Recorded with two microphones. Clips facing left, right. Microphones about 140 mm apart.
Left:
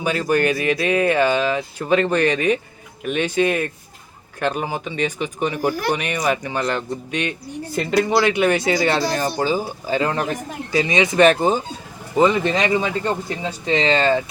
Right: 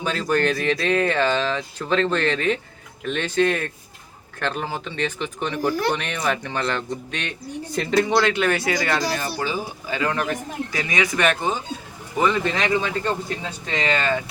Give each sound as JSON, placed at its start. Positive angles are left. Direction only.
{"t": 0.0, "sound": "speech", "side_deg": 10}
{"t": 12.1, "sound": "speech", "side_deg": 20}